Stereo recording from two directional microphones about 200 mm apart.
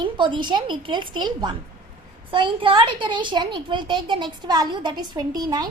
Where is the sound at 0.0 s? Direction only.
25° right (ahead or behind).